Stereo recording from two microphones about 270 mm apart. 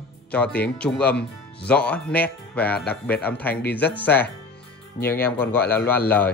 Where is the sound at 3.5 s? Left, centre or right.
Left.